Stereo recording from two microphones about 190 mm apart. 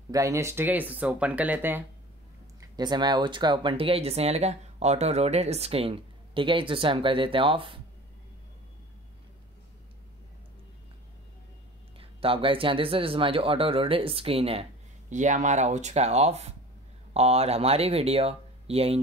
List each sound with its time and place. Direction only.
0.1 s speech: 15° right (ahead or behind)
2.7 s speech: 25° right (ahead or behind)
12.0 s speech: 30° right (ahead or behind)